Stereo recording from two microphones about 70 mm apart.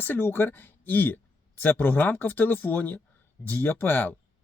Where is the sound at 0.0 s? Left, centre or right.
Left.